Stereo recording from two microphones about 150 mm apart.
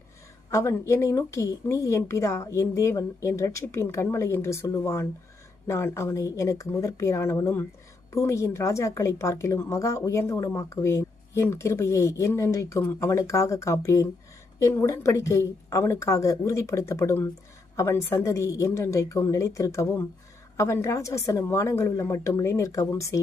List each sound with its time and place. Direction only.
0.5 s a woman's voice: 20° left (ahead or behind)